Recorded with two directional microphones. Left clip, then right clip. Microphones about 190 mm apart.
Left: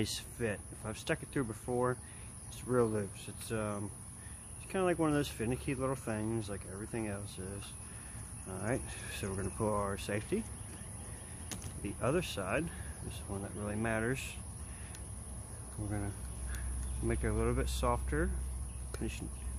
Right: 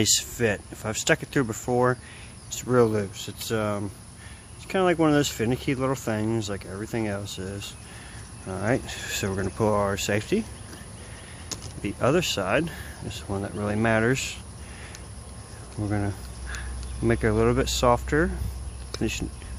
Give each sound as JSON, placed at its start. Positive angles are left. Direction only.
{"t": 0.0, "sound": "speech", "side_deg": -40}
{"t": 11.8, "sound": "speech", "side_deg": -45}
{"t": 15.9, "sound": "speech", "side_deg": -40}